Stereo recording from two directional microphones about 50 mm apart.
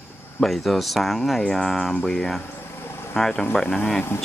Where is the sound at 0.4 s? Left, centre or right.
Centre.